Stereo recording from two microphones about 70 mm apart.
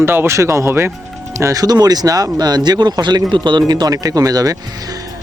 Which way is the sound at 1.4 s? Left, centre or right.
Right.